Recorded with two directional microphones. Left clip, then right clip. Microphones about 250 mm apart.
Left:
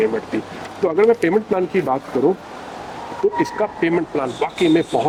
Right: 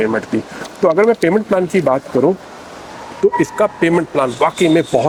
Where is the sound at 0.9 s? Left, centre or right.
Right.